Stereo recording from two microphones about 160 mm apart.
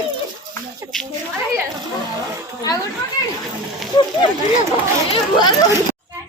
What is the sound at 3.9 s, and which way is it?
Speech, 30° left (ahead or behind).